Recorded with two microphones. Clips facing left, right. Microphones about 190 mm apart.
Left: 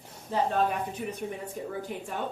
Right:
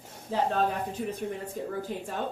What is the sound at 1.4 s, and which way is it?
Speech, 50° right (ahead or behind).